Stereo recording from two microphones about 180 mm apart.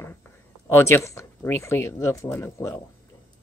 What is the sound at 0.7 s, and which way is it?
Speech, 15° left (ahead or behind).